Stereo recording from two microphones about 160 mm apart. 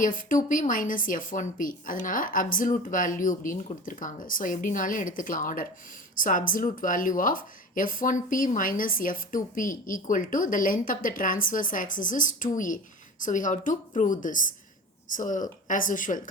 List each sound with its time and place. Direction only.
0.0 s a woman's voice: 55° left (ahead or behind)